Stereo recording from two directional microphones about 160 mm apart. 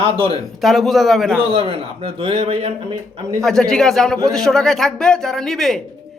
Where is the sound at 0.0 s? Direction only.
35° right (ahead or behind).